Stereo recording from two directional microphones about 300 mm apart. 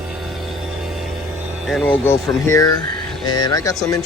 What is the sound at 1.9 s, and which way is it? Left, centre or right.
Speech, centre.